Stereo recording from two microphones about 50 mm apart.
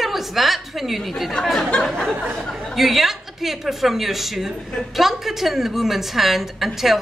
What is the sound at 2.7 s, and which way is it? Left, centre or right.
A woman's voice, centre.